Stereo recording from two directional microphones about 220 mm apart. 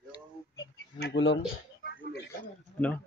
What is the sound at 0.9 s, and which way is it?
Speech, 50° left (ahead or behind).